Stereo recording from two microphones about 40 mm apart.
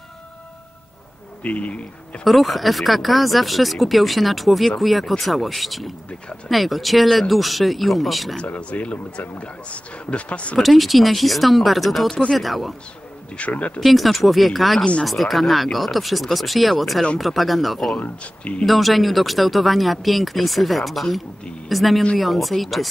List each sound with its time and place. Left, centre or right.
1.4 s speech: left
2.2 s speech: centre
8.5 s speech: left
10.6 s speech: centre
13.4 s speech: left
13.7 s speech: centre
18.0 s speech: left
18.7 s speech: centre